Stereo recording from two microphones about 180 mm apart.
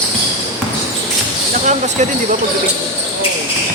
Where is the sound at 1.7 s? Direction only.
40° right (ahead or behind).